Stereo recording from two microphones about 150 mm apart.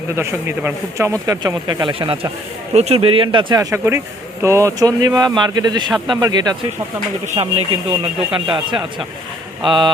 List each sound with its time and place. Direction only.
0.2 s a man's voice: 15° right (ahead or behind); by 3.4 s 35° right (ahead or behind)
3.5 s speech: 20° right (ahead or behind)
7.3 s speech: 40° right (ahead or behind)